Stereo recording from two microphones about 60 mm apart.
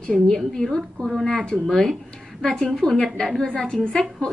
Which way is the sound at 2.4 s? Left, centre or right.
Centre.